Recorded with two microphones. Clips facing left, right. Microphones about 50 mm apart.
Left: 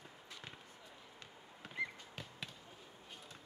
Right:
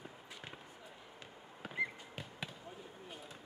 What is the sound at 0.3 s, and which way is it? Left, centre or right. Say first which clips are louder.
Basketball bounce: even; centre.